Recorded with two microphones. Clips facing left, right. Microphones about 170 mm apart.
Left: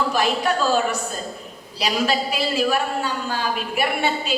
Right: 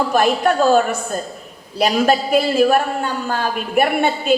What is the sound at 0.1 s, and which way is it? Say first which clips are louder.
A man's voice: right 5 dB; 50° right (ahead or behind).